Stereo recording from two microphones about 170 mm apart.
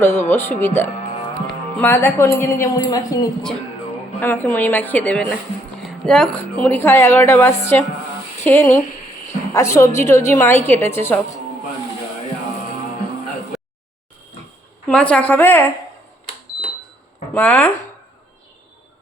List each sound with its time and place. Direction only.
0.0 s a woman's voice: 15° left (ahead or behind)
4.2 s a woman's voice: 10° left (ahead or behind)
14.8 s a woman's voice: 5° left (ahead or behind)
17.3 s a woman's voice: 10° left (ahead or behind)